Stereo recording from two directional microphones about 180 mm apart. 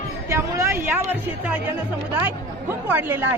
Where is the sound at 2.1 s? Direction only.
10° right (ahead or behind).